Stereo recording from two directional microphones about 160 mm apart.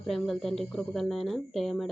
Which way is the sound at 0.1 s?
Centre (ahead or behind).